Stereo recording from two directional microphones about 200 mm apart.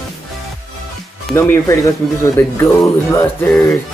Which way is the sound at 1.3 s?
10° left (ahead or behind).